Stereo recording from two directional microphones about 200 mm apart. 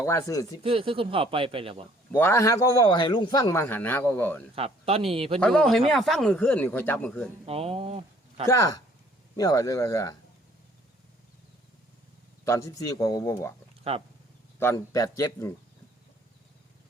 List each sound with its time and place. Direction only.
0.0 s speech: 15° left (ahead or behind)
0.6 s speech: 30° right (ahead or behind)
2.1 s speech: 10° left (ahead or behind)
4.5 s speech: 30° right (ahead or behind)
5.4 s speech: 5° left (ahead or behind)
7.4 s speech: 30° right (ahead or behind)
8.4 s speech: 15° left (ahead or behind)
12.5 s speech: 15° left (ahead or behind)
14.6 s speech: 15° left (ahead or behind)